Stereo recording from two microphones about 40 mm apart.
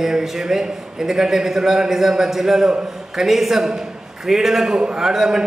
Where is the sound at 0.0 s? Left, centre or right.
Centre.